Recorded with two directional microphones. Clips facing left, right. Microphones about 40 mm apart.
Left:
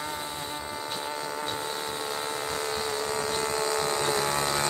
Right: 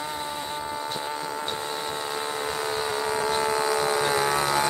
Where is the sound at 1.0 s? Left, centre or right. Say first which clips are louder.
Right 2 dB; centre.